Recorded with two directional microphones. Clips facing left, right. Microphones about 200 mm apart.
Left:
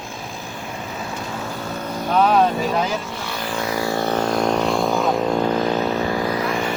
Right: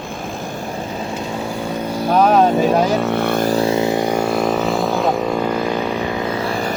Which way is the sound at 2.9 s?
65° right (ahead or behind).